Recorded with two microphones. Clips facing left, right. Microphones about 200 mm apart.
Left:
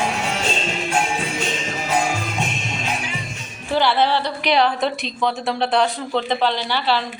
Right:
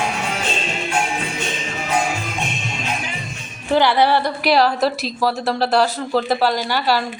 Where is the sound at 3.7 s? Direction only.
15° right (ahead or behind).